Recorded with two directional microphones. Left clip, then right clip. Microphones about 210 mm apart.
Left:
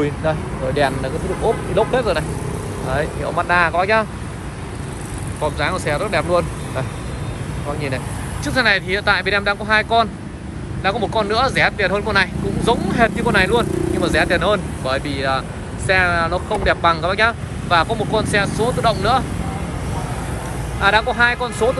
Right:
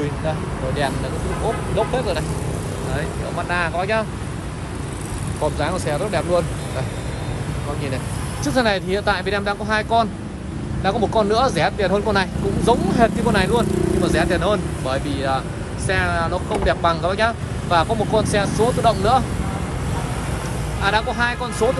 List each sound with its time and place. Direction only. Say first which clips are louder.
0.0 s speech: left 4 dB; centre (ahead or behind)
5.4 s speech: left 2 dB; 15° right (ahead or behind)
8.5 s speech: left 3 dB; 15° right (ahead or behind)
20.8 s speech: left 5 dB; 10° right (ahead or behind)